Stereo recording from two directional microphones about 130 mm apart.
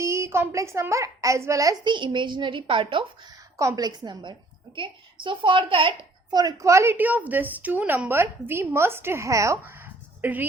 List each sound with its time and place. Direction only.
0.0 s a woman's voice: 20° right (ahead or behind); by 3.3 s 40° right (ahead or behind)
3.6 s a woman's voice: 25° right (ahead or behind)